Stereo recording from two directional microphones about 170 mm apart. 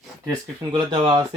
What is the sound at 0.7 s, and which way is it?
Speech, 25° right (ahead or behind).